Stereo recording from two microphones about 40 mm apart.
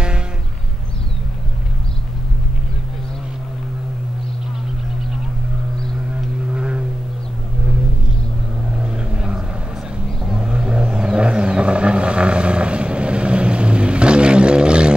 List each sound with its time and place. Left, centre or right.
6.5 s vehicle: right
8.7 s vehicle: centre